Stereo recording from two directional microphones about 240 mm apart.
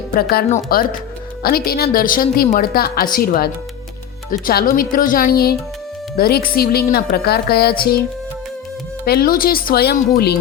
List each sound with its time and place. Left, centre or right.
0.1 s a woman's voice: left
9.0 s a woman's voice: left